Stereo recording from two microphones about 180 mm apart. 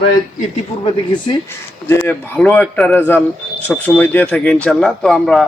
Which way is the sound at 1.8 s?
10° left (ahead or behind).